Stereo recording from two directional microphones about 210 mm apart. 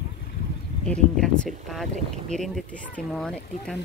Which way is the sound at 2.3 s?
Centre (ahead or behind).